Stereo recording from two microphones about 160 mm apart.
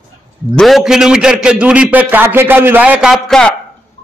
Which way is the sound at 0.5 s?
Centre (ahead or behind).